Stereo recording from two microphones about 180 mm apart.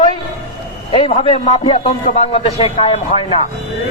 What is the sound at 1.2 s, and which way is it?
A man's voice, 40° left (ahead or behind).